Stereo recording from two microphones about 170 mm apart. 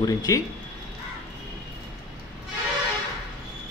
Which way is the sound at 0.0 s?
20° left (ahead or behind).